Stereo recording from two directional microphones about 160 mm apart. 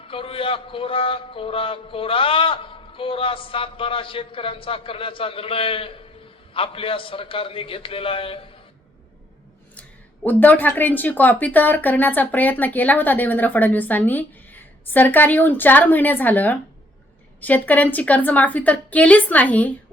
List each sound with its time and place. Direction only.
0.1 s a man's voice: 35° left (ahead or behind)
10.2 s speech: 10° left (ahead or behind)